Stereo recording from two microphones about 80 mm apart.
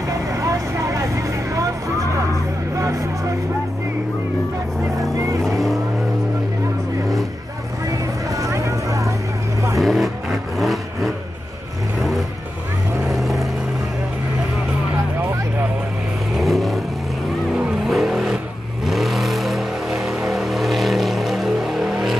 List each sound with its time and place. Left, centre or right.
0.3 s vehicle: right
2.8 s vehicle: right
7.9 s vehicle: right
9.8 s vehicle: centre
13.1 s vehicle: centre
16.3 s vehicle: centre